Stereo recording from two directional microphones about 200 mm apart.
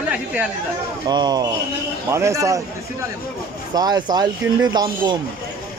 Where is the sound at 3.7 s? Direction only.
20° right (ahead or behind).